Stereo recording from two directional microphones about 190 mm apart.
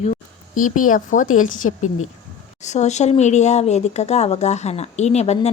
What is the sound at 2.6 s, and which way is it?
A woman's voice, 35° left (ahead or behind).